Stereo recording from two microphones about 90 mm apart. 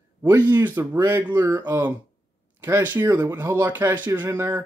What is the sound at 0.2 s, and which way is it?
Speech, 25° right (ahead or behind).